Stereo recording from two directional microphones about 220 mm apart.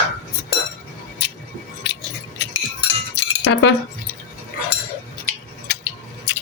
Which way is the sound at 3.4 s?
55° left (ahead or behind).